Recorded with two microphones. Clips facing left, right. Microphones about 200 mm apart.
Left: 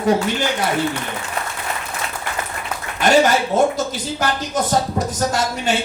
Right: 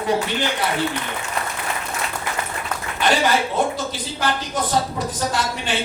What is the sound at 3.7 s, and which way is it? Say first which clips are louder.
Speech: left 4 dB; 45° left (ahead or behind).